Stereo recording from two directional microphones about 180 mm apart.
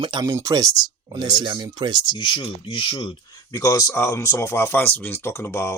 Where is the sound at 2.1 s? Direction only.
25° left (ahead or behind).